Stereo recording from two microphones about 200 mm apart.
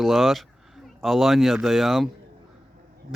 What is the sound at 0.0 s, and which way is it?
Speech, centre (ahead or behind).